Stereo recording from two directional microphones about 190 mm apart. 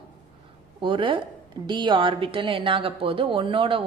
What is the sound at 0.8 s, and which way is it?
A woman's voice, 25° right (ahead or behind).